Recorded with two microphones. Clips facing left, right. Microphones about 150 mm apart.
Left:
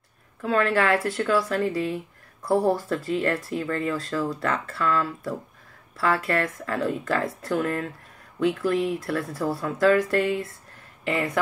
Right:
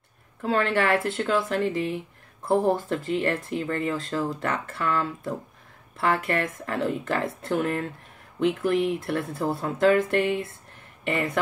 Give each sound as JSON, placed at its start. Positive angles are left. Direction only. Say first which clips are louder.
{"t": 0.4, "sound": "speech", "louder": "left 1 dB", "side_deg": -25}